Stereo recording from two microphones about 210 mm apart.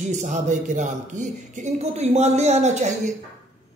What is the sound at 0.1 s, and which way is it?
A man's voice, 35° right (ahead or behind).